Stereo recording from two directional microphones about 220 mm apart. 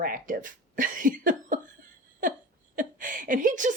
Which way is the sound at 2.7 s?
35° right (ahead or behind).